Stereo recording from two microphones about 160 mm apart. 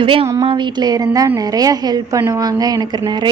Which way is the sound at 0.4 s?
30° right (ahead or behind).